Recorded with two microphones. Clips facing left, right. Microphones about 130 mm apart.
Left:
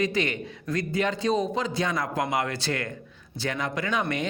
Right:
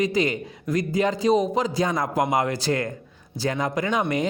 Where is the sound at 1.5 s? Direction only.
40° right (ahead or behind).